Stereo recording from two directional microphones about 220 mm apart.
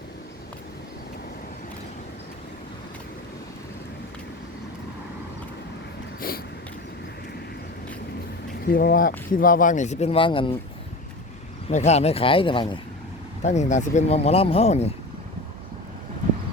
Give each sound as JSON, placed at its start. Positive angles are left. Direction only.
{"t": 6.2, "sound": "a sound", "side_deg": 40}
{"t": 8.6, "sound": "speech", "side_deg": 40}
{"t": 11.7, "sound": "speech", "side_deg": 30}
{"t": 13.4, "sound": "speech", "side_deg": 30}